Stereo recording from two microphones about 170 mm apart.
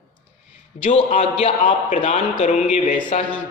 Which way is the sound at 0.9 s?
40° left (ahead or behind).